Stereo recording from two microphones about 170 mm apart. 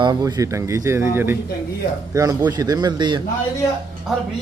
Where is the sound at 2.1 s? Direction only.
20° right (ahead or behind).